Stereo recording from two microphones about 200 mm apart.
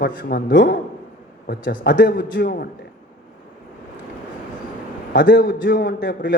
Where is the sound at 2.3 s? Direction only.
50° left (ahead or behind).